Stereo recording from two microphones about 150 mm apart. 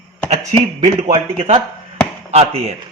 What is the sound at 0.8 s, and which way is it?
Speech, 45° right (ahead or behind).